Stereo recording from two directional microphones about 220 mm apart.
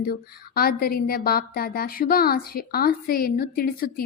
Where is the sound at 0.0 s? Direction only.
45° left (ahead or behind).